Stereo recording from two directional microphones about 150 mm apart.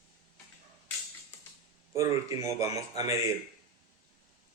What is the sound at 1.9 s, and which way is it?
Speech, 20° right (ahead or behind).